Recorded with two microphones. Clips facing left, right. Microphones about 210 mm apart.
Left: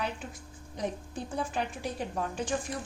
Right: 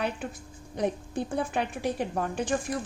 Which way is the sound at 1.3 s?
60° right (ahead or behind).